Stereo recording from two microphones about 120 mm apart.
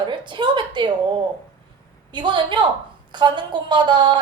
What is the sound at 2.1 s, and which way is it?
A woman's voice, 40° right (ahead or behind).